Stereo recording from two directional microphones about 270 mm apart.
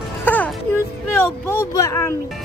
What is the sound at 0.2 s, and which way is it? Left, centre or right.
Music, centre.